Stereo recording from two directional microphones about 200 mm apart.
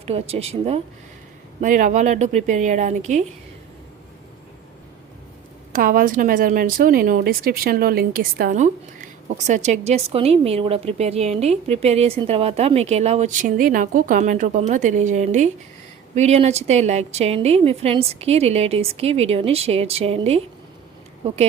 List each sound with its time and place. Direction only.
0.0 s a woman's voice: 30° right (ahead or behind)
1.6 s a woman's voice: 40° right (ahead or behind)
5.7 s a woman's voice: 45° right (ahead or behind)